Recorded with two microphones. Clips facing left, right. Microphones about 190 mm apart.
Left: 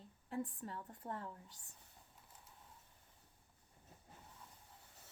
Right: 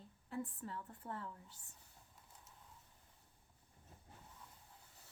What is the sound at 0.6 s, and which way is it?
Speech, 35° left (ahead or behind).